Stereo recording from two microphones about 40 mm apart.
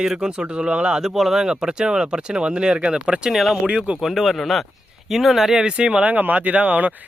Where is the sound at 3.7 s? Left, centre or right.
Right.